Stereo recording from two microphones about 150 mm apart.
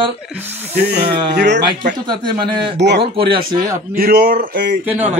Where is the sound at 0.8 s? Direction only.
90° right.